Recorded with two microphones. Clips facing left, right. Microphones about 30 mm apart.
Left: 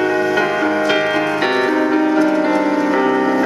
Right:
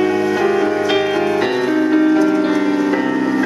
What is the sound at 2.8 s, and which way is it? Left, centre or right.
Music, centre.